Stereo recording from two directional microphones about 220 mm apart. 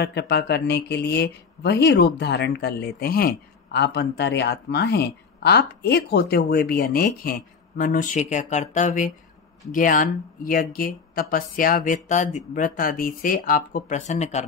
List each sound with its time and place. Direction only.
0.0 s speech: 50° left (ahead or behind); by 14.4 s 30° left (ahead or behind)